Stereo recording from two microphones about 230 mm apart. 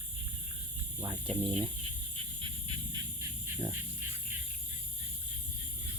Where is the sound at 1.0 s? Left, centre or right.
Right.